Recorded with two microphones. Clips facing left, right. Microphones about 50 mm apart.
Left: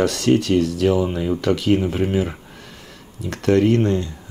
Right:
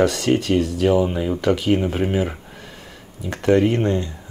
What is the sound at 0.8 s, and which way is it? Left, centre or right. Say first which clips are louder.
Speech: right 1 dB; centre.